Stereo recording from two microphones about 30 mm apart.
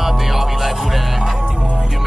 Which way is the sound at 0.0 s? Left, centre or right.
Centre.